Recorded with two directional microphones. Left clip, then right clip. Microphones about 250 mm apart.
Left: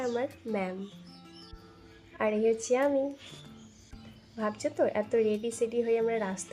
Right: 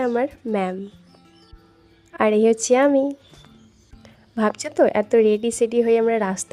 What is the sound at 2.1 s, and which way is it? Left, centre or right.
Speech, right.